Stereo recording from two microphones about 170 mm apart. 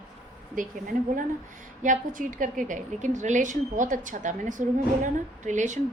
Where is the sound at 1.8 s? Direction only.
50° right (ahead or behind).